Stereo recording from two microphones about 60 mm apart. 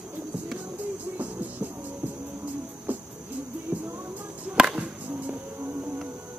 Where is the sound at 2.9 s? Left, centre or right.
Right.